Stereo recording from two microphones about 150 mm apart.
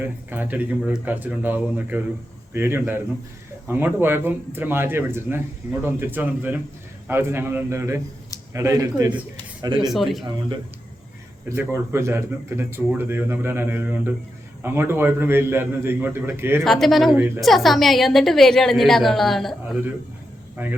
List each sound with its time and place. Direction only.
0.0 s speech: 10° right (ahead or behind)
9.9 s a woman's voice: centre (ahead or behind)
11.4 s speech: 15° right (ahead or behind)
16.6 s a woman's voice: centre (ahead or behind)
20.6 s speech: 10° right (ahead or behind)